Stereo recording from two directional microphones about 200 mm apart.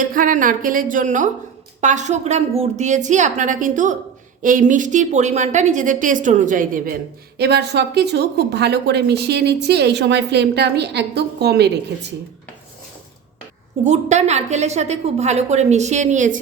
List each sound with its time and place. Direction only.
0.0 s a woman's voice: 40° right (ahead or behind)
7.3 s speech: 55° right (ahead or behind)
13.8 s a woman's voice: 35° right (ahead or behind)